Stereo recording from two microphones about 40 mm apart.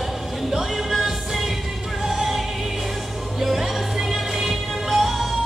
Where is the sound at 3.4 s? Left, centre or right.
Centre.